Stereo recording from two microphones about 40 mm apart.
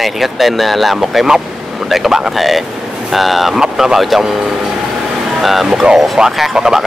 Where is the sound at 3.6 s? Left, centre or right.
Centre.